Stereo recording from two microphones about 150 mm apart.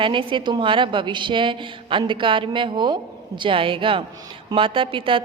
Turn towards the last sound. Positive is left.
turn(degrees=-35)  # may be behind; listen again after turning